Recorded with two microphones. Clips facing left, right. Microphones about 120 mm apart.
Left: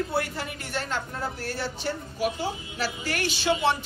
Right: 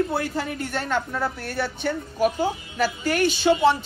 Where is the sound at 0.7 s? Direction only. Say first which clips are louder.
Right 5 dB; 55° right (ahead or behind).